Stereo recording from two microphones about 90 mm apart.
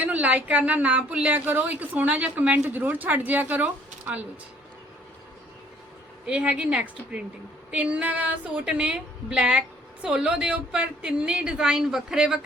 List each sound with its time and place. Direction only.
0.0 s a woman's voice: 15° right (ahead or behind)
6.2 s a woman's voice: 10° right (ahead or behind)